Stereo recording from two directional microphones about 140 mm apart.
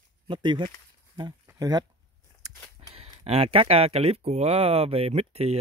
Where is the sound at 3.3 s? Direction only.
45° right (ahead or behind).